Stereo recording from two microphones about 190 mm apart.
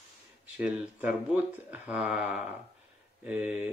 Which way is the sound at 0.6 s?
5° right (ahead or behind).